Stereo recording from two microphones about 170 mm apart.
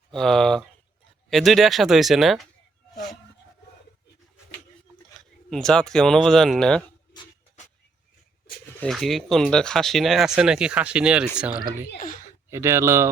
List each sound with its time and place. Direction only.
0.1 s speech: 5° left (ahead or behind)
5.5 s speech: 5° left (ahead or behind)
8.8 s speech: centre (ahead or behind); by 13.1 s 15° right (ahead or behind)